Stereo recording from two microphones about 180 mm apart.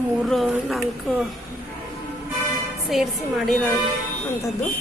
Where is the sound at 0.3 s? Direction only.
Centre (ahead or behind).